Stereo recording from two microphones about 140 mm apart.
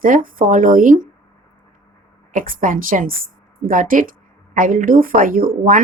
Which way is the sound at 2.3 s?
75° right (ahead or behind).